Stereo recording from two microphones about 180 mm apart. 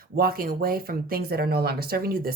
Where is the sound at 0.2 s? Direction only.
55° right (ahead or behind).